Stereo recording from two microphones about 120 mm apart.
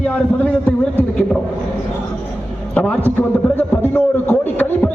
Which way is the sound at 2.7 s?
10° left (ahead or behind).